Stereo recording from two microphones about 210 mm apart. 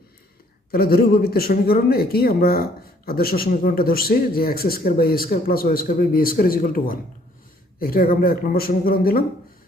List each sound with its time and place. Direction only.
0.7 s a man's voice: 45° left (ahead or behind)